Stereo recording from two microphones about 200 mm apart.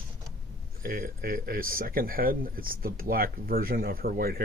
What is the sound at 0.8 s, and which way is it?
Speech, 45° right (ahead or behind).